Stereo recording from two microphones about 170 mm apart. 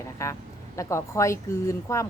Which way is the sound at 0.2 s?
15° left (ahead or behind).